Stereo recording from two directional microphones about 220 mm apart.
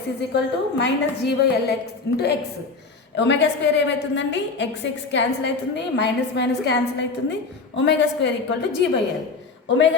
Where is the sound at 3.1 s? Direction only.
55° left (ahead or behind).